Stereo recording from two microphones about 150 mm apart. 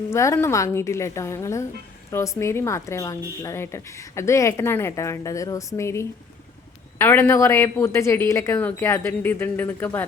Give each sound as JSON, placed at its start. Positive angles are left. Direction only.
{"t": 0.1, "sound": "a woman's voice", "side_deg": 20}